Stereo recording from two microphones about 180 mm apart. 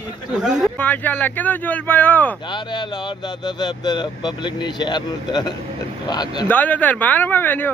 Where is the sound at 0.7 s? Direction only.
10° left (ahead or behind).